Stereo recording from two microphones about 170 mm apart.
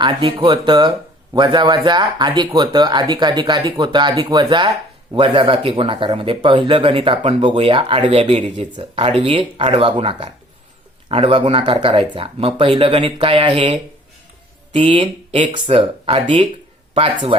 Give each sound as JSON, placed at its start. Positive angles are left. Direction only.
{"t": 0.0, "sound": "speech", "side_deg": -30}
{"t": 14.7, "sound": "speech", "side_deg": -40}